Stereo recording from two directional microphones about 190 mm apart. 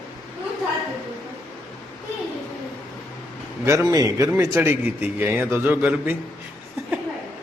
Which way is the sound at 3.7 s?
15° right (ahead or behind).